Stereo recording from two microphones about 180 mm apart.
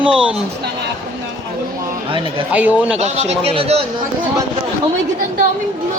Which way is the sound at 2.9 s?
35° right (ahead or behind).